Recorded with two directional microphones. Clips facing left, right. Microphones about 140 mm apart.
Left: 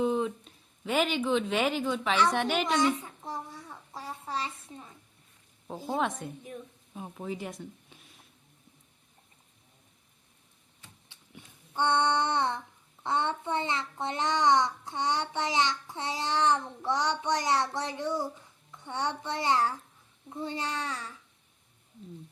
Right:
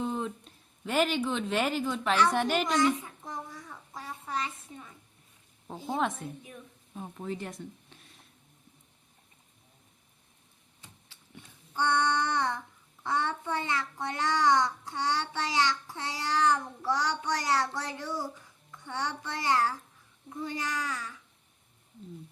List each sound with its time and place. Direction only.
0.0 s speech: 5° left (ahead or behind)
3.2 s a sound: 30° left (ahead or behind)
5.9 s a woman's voice: centre (ahead or behind)
11.7 s a child's voice: 25° left (ahead or behind)